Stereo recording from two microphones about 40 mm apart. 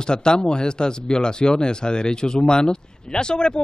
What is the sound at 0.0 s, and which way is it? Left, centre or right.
Speech, left.